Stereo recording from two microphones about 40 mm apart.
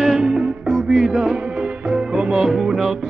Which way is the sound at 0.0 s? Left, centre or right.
Centre.